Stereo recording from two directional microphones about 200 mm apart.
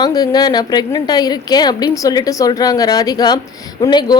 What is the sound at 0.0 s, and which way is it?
A woman's voice, 20° left (ahead or behind).